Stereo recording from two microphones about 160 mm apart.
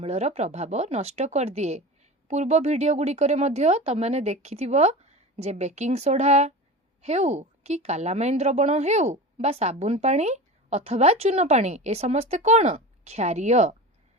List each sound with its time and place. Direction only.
0.0 s a woman's voice: 45° right (ahead or behind)